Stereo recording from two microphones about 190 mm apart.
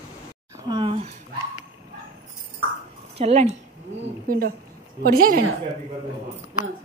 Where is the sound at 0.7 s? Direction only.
25° right (ahead or behind).